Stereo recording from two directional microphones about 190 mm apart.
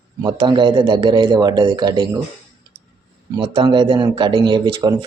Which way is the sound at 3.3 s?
25° right (ahead or behind).